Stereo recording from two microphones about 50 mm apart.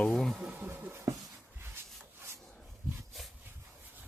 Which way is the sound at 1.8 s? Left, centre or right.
Right.